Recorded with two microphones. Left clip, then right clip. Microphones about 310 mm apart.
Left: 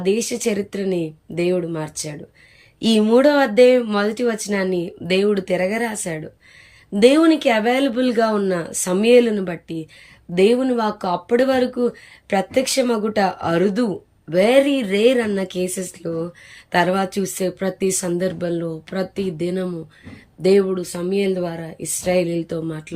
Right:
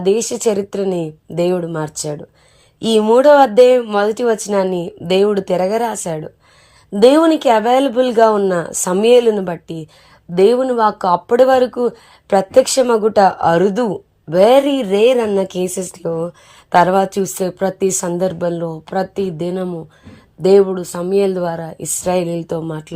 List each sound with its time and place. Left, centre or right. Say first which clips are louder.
0.0 s speech: right 5 dB; centre